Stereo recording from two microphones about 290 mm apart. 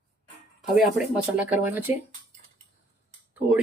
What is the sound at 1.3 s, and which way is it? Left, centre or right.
Speech, centre.